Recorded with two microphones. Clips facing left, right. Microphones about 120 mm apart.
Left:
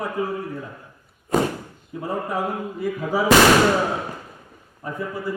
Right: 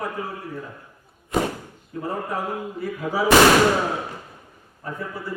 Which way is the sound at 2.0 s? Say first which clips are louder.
Left 2 dB; 15° left (ahead or behind).